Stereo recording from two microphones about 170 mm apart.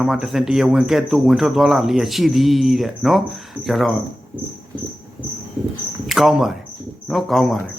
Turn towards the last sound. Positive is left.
turn(degrees=0)  # may be behind; listen again after turning